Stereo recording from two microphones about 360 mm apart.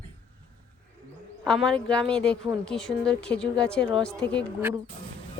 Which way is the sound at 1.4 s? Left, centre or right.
Centre.